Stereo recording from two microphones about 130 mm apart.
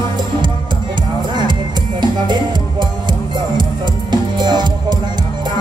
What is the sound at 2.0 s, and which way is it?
Music, 35° right (ahead or behind).